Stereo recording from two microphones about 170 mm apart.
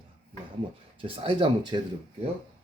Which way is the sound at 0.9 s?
30° right (ahead or behind).